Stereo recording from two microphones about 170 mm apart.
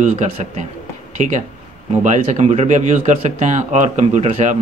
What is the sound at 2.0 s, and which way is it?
Speech, 45° right (ahead or behind).